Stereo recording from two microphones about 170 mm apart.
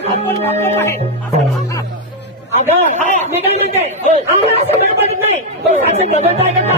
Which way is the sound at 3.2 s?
40° right (ahead or behind).